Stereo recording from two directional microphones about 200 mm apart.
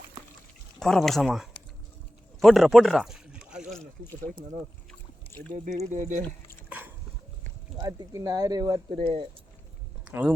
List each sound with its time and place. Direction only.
0.8 s speech: centre (ahead or behind)
5.6 s speech: 40° right (ahead or behind)
6.7 s a sound: 10° right (ahead or behind)
7.8 s speech: 20° right (ahead or behind)
10.1 s speech: 10° right (ahead or behind)